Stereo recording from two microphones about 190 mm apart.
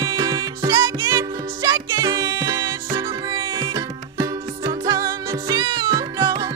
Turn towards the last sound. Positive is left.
turn(degrees=-20)  # may be behind; listen again after turning